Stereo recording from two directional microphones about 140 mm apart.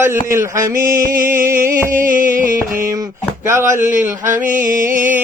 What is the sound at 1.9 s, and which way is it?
Music, 75° right (ahead or behind).